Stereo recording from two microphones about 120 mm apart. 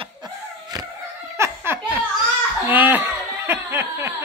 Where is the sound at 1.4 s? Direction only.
20° right (ahead or behind).